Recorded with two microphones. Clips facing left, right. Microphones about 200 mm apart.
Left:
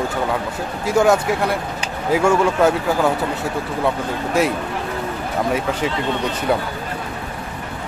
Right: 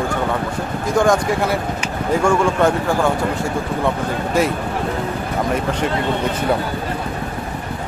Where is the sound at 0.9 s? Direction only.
5° left (ahead or behind).